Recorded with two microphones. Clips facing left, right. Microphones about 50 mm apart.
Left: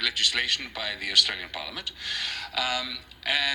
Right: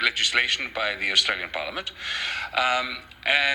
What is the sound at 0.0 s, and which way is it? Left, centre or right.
A man's voice, right.